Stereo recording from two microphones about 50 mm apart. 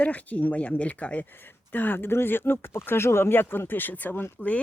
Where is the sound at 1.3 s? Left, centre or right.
Left.